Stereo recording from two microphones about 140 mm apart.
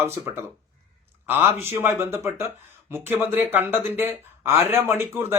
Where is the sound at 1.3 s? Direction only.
15° right (ahead or behind).